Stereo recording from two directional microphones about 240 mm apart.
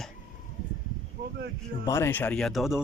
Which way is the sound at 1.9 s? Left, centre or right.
Centre.